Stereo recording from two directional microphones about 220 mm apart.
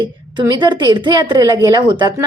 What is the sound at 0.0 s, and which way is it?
A woman's voice, 20° right (ahead or behind).